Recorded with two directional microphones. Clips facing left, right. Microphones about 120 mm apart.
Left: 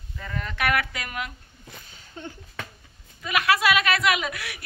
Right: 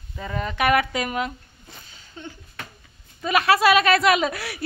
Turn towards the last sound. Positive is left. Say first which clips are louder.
# right 7 dB
turn(degrees=-35)  # may be behind; listen again after turning